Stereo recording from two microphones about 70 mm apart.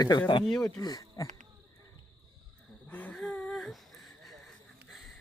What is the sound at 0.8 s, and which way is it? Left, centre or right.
Speech, left.